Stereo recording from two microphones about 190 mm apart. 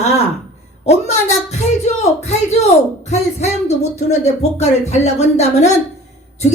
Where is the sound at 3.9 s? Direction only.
35° left (ahead or behind).